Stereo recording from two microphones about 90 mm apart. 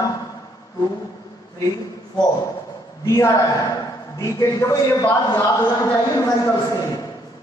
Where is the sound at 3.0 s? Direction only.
35° left (ahead or behind).